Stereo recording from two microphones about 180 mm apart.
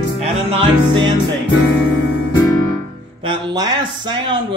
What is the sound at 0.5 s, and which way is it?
Speech, 30° right (ahead or behind).